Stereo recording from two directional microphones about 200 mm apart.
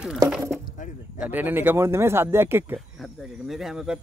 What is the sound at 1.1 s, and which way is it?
Speech, 10° right (ahead or behind).